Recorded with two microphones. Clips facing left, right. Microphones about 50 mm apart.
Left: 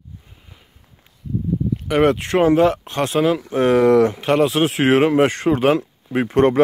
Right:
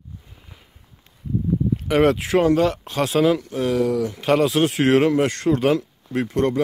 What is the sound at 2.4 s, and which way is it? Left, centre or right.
Speech, left.